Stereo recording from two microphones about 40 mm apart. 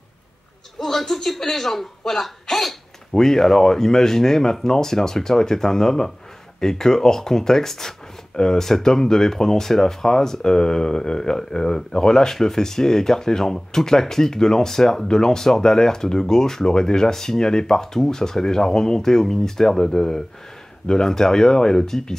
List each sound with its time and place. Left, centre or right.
0.7 s a man's voice: centre